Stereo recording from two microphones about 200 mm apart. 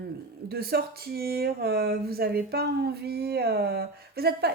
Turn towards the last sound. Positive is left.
turn(degrees=-50)  # may be behind; listen again after turning